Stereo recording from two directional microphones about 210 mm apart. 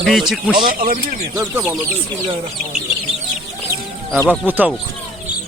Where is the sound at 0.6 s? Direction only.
40° right (ahead or behind).